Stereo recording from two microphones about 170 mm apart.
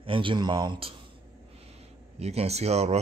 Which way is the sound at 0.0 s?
30° right (ahead or behind).